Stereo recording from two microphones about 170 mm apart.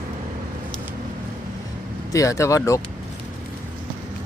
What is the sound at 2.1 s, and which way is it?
Speech, 20° left (ahead or behind).